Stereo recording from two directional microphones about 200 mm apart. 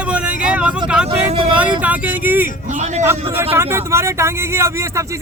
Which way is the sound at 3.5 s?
10° right (ahead or behind).